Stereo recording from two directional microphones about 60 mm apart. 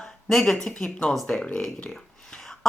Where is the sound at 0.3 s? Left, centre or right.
Centre.